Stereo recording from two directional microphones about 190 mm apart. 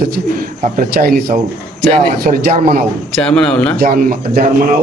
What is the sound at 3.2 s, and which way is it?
Speech, 5° left (ahead or behind).